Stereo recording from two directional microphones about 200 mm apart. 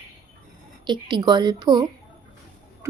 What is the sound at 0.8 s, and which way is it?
A woman's voice, 20° right (ahead or behind).